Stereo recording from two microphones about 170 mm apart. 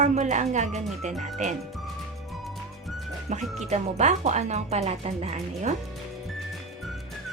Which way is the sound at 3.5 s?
40° right (ahead or behind).